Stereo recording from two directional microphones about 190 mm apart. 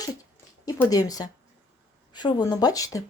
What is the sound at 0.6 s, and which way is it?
A woman's voice, 20° left (ahead or behind).